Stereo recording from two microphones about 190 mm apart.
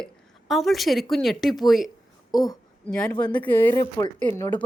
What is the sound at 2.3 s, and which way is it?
Speech, 20° left (ahead or behind).